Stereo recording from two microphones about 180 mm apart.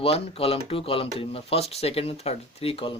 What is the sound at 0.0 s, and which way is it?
Speech, 35° left (ahead or behind).